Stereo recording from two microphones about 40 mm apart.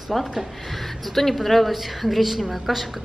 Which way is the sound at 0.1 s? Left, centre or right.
Centre.